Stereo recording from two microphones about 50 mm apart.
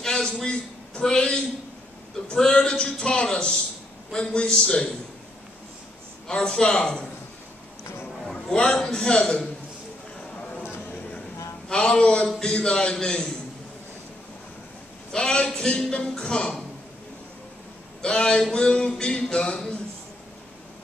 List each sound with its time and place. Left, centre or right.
0.0 s a sound: centre
1.0 s speech: centre
6.2 s speech: centre
8.3 s a man's voice: centre
11.7 s speech: centre
15.1 s speech: centre
18.0 s speech: centre